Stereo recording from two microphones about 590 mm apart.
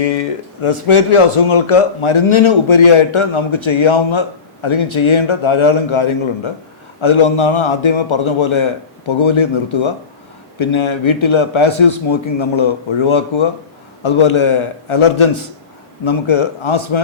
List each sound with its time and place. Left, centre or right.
0.0 s speech: left